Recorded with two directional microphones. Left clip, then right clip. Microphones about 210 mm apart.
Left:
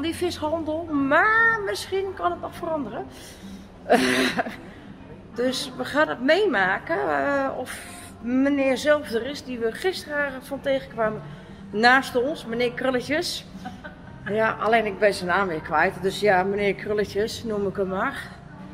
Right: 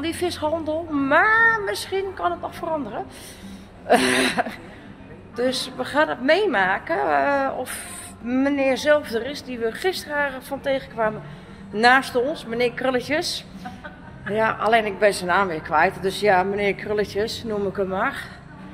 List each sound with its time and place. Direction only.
0.0 s a woman's voice: 10° left (ahead or behind)